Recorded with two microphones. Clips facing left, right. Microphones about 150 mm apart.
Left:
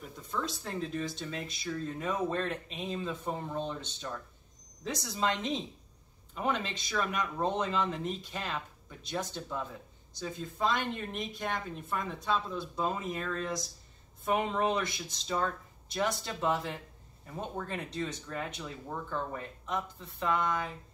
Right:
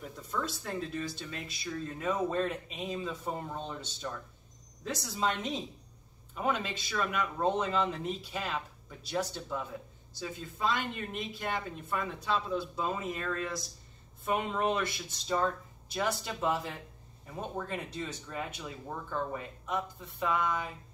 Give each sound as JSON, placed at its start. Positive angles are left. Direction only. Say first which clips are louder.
{"t": 0.7, "sound": "speech", "louder": "left 3 dB", "side_deg": -5}